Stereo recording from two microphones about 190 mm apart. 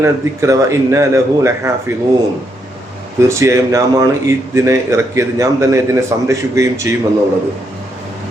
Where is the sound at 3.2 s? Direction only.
15° right (ahead or behind).